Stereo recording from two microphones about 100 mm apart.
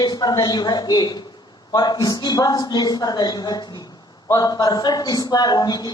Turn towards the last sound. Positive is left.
turn(degrees=40)  # may be behind; listen again after turning